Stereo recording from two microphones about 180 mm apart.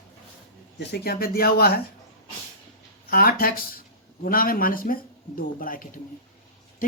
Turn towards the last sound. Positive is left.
turn(degrees=50)  # may be behind; listen again after turning